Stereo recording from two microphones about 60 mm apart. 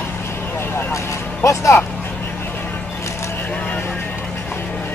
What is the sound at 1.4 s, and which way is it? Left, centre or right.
Speech, left.